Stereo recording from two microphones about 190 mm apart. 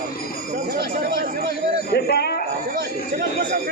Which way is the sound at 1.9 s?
55° left (ahead or behind).